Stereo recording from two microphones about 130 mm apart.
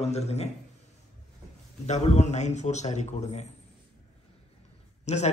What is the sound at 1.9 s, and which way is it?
A man's voice, 60° left (ahead or behind).